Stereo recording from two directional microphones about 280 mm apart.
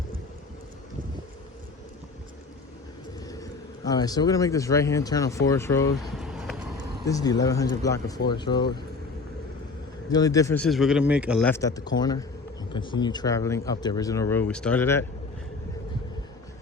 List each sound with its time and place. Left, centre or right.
3.2 s vehicle: centre
3.8 s speech: centre
6.1 s a sound: centre
7.1 s speech: centre
10.1 s speech: centre